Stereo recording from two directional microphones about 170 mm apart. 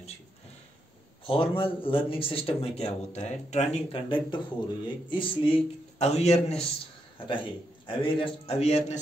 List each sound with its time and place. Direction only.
1.2 s a man's voice: 30° left (ahead or behind)
5.9 s a man's voice: 40° left (ahead or behind)